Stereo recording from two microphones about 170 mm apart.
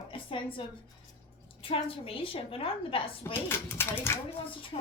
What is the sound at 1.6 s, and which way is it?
A woman's voice, 35° left (ahead or behind).